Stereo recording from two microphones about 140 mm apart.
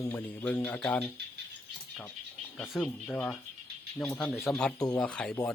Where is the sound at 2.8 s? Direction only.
10° left (ahead or behind).